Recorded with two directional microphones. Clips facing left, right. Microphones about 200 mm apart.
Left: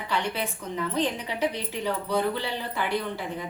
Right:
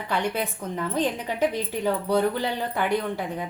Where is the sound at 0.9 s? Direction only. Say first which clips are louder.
Right 3 dB; 50° right (ahead or behind).